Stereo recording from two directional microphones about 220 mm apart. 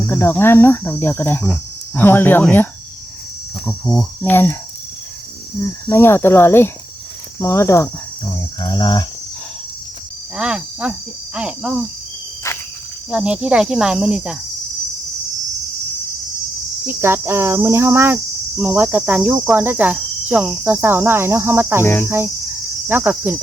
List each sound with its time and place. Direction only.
0.0 s cricket: 10° left (ahead or behind)
3.7 s cricket: 5° left (ahead or behind)
5.9 s cricket: 10° left (ahead or behind)
10.3 s speech: 5° right (ahead or behind)
13.1 s speech: 5° right (ahead or behind)
16.8 s cricket: 10° right (ahead or behind)
22.9 s cricket: 10° right (ahead or behind)